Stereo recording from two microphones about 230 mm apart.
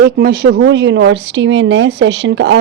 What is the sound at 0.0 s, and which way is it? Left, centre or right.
A woman's voice, right.